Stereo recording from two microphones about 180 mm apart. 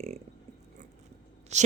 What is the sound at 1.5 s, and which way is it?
Speech, 40° right (ahead or behind).